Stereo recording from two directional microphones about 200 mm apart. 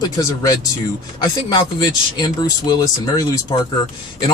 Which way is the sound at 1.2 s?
20° left (ahead or behind).